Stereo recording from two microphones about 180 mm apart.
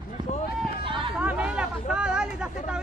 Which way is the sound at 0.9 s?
25° right (ahead or behind).